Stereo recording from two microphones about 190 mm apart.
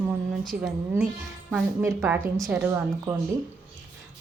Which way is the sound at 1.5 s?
10° right (ahead or behind).